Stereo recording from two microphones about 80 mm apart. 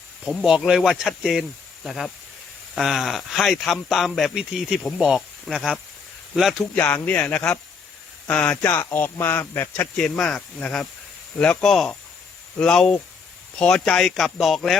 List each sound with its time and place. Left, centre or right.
0.3 s speech: centre
0.8 s speech: centre
1.2 s speech: centre
6.7 s speech: centre
8.6 s speech: left
10.0 s speech: centre
11.7 s speech: centre